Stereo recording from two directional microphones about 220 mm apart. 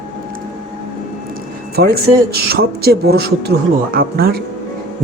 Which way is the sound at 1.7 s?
45° right (ahead or behind).